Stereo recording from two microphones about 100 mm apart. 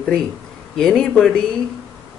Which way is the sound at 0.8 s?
5° left (ahead or behind).